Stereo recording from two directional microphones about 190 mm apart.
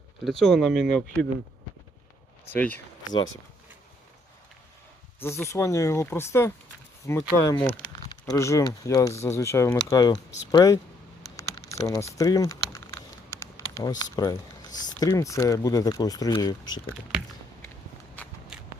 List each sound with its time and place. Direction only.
0.3 s speech: centre (ahead or behind)
2.5 s speech: 10° left (ahead or behind)
3.0 s speech: 20° left (ahead or behind)
5.2 s speech: 15° left (ahead or behind)
11.3 s typing: 15° left (ahead or behind)
11.9 s a sound: 15° left (ahead or behind)
14.0 s speech: 20° left (ahead or behind)
18.5 s walk: 5° right (ahead or behind)